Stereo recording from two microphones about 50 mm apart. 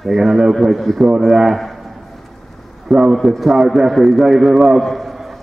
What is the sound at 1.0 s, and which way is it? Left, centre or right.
Speech, centre.